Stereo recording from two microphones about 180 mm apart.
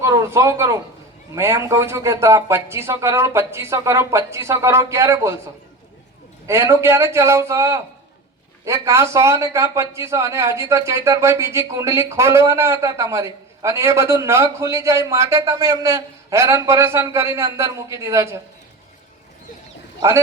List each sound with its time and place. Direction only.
0.0 s speech: 15° right (ahead or behind)
6.5 s speech: 15° right (ahead or behind)